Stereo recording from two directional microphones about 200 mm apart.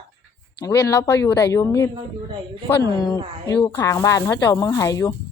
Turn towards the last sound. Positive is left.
turn(degrees=15)  # may be behind; listen again after turning